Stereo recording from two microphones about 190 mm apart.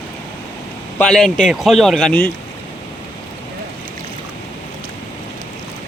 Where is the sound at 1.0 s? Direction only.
5° left (ahead or behind).